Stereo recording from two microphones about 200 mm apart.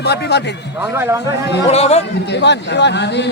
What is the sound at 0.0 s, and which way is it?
Speech, 55° left (ahead or behind).